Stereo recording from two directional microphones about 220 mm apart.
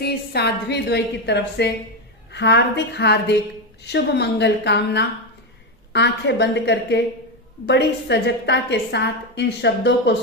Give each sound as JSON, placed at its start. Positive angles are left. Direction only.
{"t": 0.0, "sound": "a woman's voice", "side_deg": 50}